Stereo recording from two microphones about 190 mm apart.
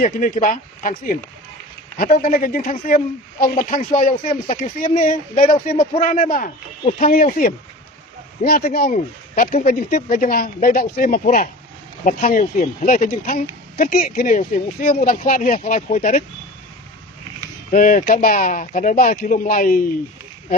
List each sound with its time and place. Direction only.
0.0 s speech: 45° left (ahead or behind)
17.7 s speech: 45° left (ahead or behind)